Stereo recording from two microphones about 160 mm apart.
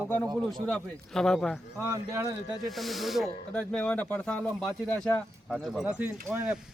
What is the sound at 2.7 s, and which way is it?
Speech, centre (ahead or behind).